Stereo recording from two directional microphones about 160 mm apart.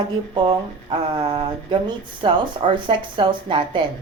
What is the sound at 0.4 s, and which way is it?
A woman's voice, 30° right (ahead or behind).